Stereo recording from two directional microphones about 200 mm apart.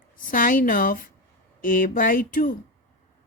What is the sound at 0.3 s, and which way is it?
A woman's voice, 40° left (ahead or behind).